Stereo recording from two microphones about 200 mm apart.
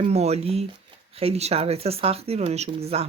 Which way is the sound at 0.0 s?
30° right (ahead or behind).